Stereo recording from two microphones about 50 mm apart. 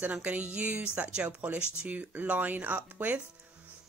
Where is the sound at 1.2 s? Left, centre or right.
Right.